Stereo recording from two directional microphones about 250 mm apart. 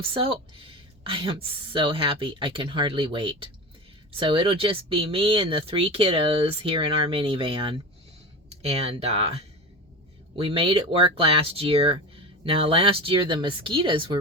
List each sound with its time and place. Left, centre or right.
0.1 s speech: right